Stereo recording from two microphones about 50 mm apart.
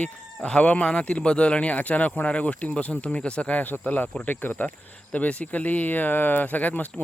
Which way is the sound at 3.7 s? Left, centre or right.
Left.